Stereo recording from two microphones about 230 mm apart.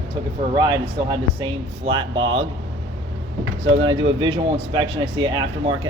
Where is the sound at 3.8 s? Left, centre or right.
Right.